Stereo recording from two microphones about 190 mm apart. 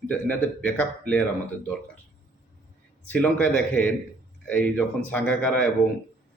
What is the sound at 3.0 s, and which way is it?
A man's voice, 10° left (ahead or behind).